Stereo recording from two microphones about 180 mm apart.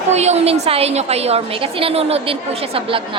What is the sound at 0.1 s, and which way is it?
A woman's voice, 40° right (ahead or behind).